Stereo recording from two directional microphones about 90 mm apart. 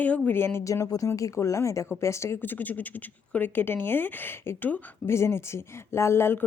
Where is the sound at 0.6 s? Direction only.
40° left (ahead or behind).